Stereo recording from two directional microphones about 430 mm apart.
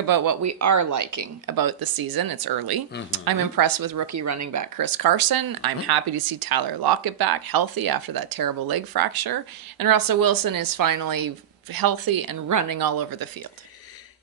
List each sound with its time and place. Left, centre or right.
0.0 s speech: right